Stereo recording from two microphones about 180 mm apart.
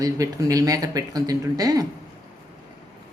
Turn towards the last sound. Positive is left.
turn(degrees=-20)  # may be behind; listen again after turning